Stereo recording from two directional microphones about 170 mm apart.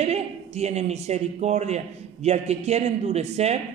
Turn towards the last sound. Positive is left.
turn(degrees=-40)  # may be behind; listen again after turning